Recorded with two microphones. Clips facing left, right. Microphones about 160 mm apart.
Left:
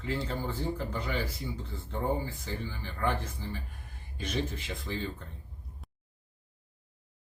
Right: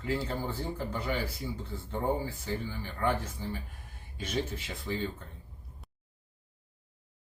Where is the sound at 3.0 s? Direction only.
10° right (ahead or behind).